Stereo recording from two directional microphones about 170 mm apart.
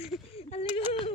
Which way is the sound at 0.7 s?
35° left (ahead or behind).